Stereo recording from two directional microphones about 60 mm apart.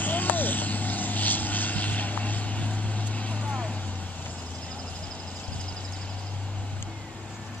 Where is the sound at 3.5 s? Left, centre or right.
Centre.